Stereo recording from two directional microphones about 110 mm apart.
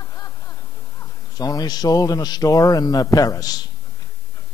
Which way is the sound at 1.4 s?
35° left (ahead or behind).